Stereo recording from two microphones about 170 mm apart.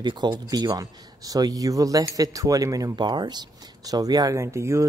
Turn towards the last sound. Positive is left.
turn(degrees=-15)  # may be behind; listen again after turning